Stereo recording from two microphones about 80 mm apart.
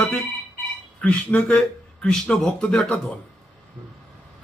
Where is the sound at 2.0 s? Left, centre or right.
Centre.